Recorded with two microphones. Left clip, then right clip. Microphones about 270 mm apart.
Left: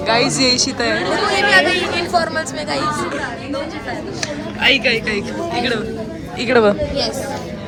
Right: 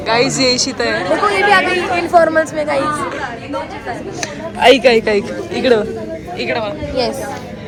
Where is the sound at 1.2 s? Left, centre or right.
Centre.